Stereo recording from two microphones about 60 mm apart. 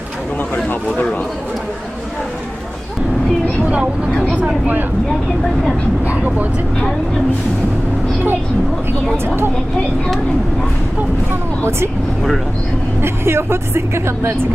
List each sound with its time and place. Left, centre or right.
4.1 s vehicle: centre
6.1 s speech: right
9.2 s speech: right
13.0 s a woman's voice: right